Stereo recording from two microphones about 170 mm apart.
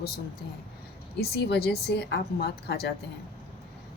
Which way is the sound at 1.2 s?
70° left (ahead or behind).